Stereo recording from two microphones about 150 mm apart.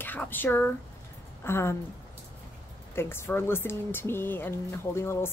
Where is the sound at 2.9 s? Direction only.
15° left (ahead or behind).